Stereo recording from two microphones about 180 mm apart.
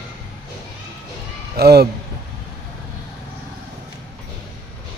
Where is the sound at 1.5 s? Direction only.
60° right (ahead or behind).